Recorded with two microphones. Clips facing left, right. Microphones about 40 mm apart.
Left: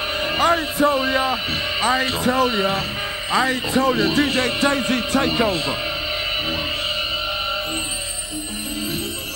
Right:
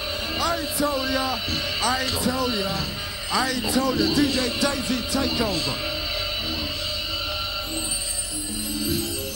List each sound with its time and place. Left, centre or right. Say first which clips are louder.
0.2 s a man's voice: left 8 dB; left